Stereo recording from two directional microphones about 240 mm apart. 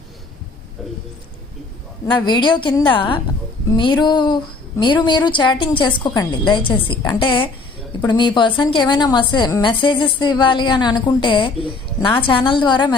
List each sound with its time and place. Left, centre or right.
2.0 s a woman's voice: centre